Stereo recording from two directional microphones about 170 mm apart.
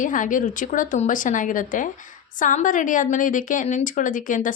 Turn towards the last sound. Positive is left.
turn(degrees=50)  # may be behind; listen again after turning